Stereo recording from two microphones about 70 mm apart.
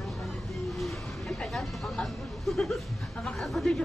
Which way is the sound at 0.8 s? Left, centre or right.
Centre.